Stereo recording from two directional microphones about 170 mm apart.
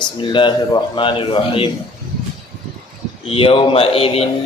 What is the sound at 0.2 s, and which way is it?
A man's voice, 30° left (ahead or behind).